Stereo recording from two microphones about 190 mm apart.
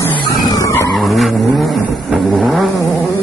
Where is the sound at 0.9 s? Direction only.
Centre (ahead or behind).